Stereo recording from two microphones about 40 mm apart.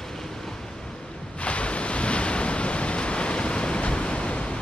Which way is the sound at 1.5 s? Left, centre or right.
Left.